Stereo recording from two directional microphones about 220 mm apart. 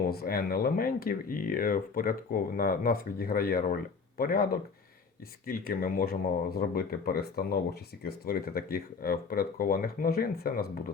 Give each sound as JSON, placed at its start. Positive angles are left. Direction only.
{"t": 0.1, "sound": "speech", "side_deg": 45}